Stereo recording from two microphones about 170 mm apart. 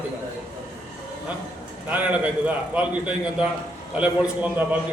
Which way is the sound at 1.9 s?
10° right (ahead or behind).